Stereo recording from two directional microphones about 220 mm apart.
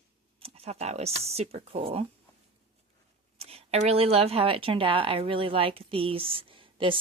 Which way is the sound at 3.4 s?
25° right (ahead or behind).